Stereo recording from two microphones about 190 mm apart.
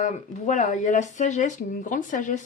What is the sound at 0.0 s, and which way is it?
A woman's voice, 40° left (ahead or behind).